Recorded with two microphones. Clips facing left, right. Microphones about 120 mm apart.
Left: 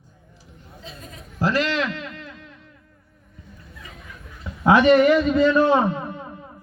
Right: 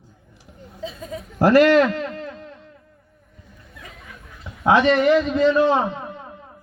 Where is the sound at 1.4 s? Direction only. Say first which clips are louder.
Right 9 dB; 55° right (ahead or behind); by 2.5 s 35° right (ahead or behind).